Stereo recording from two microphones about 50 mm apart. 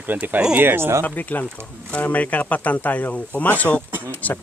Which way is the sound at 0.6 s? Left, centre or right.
Right.